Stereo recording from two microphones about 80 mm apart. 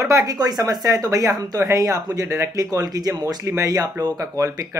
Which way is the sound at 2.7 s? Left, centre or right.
Right.